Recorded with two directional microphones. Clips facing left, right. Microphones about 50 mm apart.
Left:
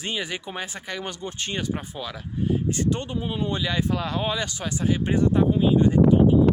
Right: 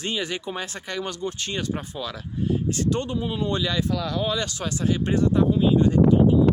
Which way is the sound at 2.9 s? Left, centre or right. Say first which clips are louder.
Right 1 dB; centre.